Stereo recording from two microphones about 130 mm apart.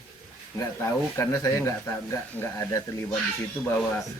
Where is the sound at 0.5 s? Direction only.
20° left (ahead or behind).